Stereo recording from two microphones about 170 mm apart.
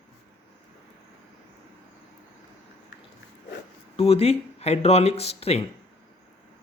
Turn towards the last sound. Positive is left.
turn(degrees=35)  # may be behind; listen again after turning